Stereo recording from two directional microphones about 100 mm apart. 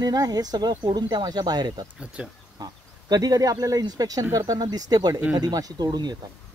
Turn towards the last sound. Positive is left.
turn(degrees=-45)  # may be behind; listen again after turning